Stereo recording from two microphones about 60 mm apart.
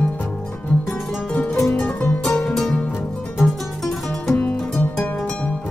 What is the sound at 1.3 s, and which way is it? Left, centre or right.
Music, centre.